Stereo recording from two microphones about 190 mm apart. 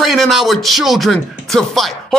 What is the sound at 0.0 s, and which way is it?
Speech, centre (ahead or behind).